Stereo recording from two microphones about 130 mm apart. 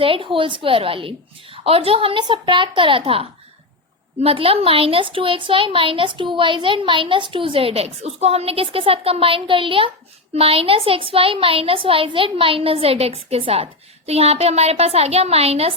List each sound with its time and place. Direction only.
0.0 s a woman's voice: 40° right (ahead or behind)